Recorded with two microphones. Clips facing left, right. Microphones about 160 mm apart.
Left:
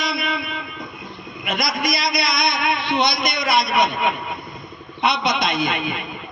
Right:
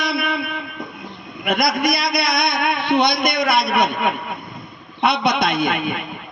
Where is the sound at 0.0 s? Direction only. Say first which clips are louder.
Right 3 dB; 60° right (ahead or behind).